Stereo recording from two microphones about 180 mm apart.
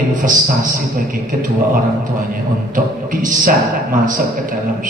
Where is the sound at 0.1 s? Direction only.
45° right (ahead or behind).